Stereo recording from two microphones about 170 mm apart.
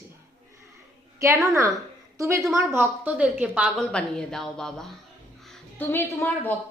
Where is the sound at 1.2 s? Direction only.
20° right (ahead or behind).